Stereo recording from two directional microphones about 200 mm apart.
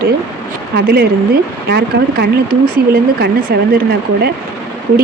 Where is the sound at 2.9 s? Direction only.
55° right (ahead or behind).